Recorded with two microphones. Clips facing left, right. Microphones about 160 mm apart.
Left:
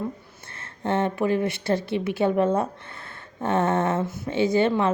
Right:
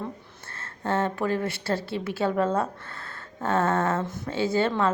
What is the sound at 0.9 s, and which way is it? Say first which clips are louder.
A woman's voice: left 3 dB; 20° left (ahead or behind).